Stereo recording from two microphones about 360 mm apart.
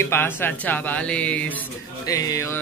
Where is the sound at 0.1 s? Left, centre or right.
Centre.